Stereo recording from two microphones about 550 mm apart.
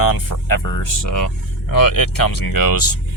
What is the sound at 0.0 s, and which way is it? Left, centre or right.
Speech, left.